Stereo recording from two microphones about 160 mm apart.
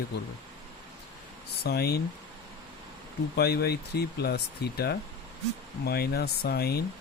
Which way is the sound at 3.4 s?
90° left.